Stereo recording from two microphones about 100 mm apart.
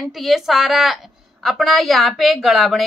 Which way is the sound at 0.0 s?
Centre (ahead or behind).